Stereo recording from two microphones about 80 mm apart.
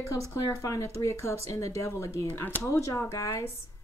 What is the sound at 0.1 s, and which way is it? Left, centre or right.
Speech, left.